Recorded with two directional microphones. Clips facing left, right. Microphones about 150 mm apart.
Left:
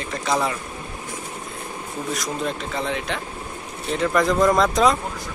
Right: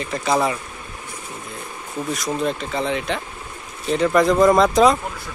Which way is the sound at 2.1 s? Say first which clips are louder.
Right 4 dB; centre (ahead or behind).